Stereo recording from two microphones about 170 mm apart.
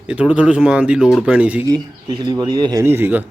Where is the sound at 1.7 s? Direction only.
25° right (ahead or behind).